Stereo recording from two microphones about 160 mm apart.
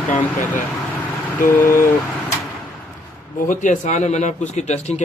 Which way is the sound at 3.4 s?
50° left (ahead or behind).